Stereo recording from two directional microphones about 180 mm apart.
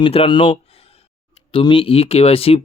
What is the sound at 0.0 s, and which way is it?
Speech, 30° left (ahead or behind).